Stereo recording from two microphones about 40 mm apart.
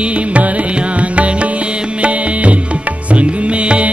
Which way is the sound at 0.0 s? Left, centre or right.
Right.